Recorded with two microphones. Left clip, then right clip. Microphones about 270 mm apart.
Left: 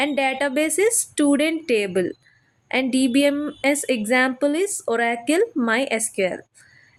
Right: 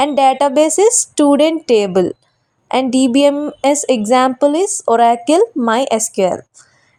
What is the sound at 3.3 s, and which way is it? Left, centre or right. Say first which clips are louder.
Speech: right 7 dB; right.